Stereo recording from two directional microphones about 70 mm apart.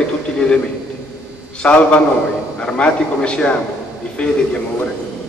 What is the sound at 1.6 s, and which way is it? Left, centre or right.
A man's voice, centre.